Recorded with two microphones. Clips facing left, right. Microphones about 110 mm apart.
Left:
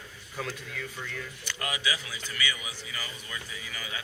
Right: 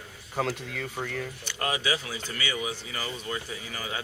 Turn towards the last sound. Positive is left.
turn(degrees=-40)  # may be behind; listen again after turning